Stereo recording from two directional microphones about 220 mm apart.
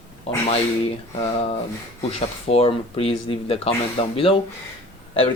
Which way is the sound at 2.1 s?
25° left (ahead or behind).